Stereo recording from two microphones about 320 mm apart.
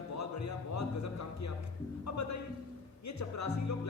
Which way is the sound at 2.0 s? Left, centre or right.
Left.